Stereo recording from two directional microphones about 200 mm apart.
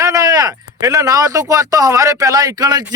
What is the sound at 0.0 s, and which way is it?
A man's voice, 15° right (ahead or behind).